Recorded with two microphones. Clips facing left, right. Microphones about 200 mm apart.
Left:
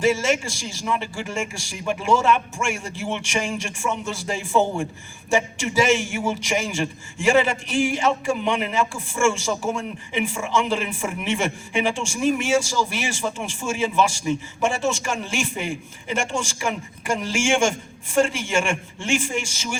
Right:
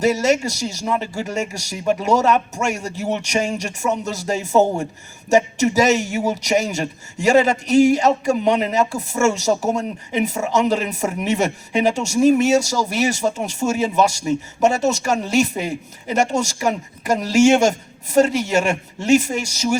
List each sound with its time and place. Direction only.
0.0 s a man's voice: 40° right (ahead or behind)